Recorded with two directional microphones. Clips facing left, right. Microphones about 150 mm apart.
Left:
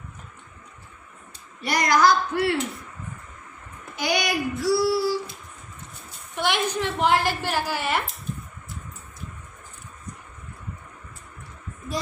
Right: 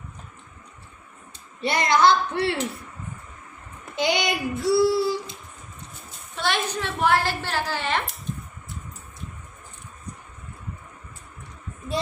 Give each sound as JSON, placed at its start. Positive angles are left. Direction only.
{"t": 1.6, "sound": "a woman's voice", "side_deg": -25}
{"t": 3.9, "sound": "child singing", "side_deg": -25}
{"t": 6.3, "sound": "a sound", "side_deg": 15}
{"t": 6.7, "sound": "a woman's voice", "side_deg": 15}